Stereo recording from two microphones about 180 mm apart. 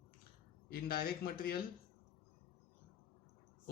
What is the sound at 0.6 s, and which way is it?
Speech, 55° left (ahead or behind).